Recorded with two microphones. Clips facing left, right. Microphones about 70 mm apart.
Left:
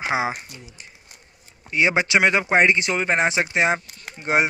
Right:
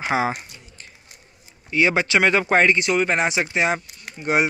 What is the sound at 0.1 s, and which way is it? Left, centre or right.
Speech, centre.